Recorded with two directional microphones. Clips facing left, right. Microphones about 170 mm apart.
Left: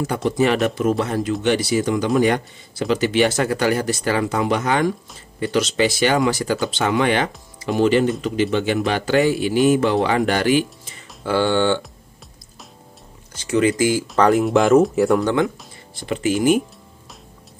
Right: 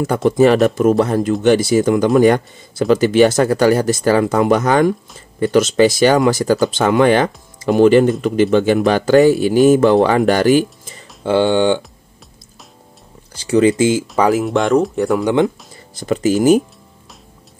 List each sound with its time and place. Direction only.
0.0 s speech: 50° right (ahead or behind)
11.2 s speech: 20° right (ahead or behind)
13.3 s speech: 35° right (ahead or behind)
14.1 s speech: 5° right (ahead or behind)
15.4 s speech: 40° right (ahead or behind)